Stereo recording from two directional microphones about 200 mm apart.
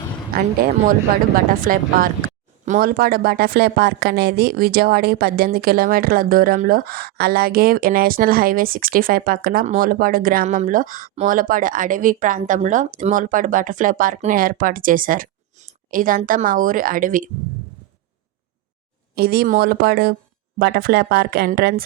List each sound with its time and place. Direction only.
0.3 s speech: 50° right (ahead or behind)
1.6 s speech: 45° right (ahead or behind)
19.1 s speech: 50° right (ahead or behind)